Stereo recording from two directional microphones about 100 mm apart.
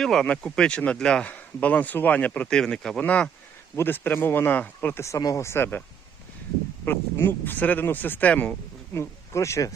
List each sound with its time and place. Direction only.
0.0 s speech: 5° left (ahead or behind)
5.0 s speech: 30° left (ahead or behind)
6.8 s speech: 20° left (ahead or behind)